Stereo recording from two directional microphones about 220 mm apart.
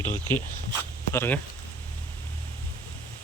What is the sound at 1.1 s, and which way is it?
Speech, 10° left (ahead or behind).